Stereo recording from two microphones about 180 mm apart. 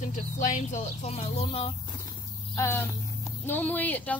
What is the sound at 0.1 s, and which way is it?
Speech, 45° left (ahead or behind).